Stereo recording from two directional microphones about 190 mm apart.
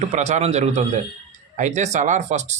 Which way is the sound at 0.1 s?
40° right (ahead or behind).